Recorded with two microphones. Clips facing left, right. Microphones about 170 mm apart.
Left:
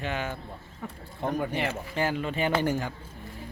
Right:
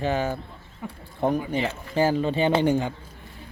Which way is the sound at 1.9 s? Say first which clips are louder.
Right 9 dB; 30° right (ahead or behind).